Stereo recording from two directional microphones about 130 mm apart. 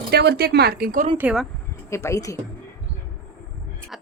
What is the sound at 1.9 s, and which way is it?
Speech, 20° left (ahead or behind).